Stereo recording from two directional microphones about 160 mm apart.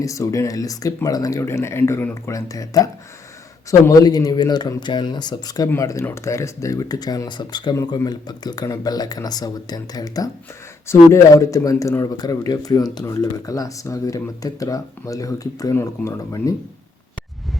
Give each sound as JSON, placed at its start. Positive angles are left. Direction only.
{"t": 0.0, "sound": "speech", "side_deg": 20}